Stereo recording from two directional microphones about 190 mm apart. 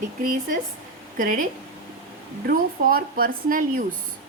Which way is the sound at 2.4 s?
50° right (ahead or behind).